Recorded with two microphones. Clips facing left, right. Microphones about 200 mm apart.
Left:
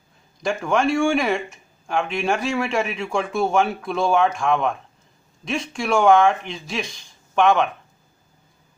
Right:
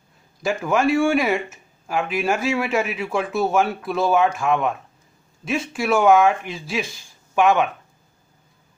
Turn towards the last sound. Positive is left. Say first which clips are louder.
# even
turn(degrees=-5)  # may be behind; listen again after turning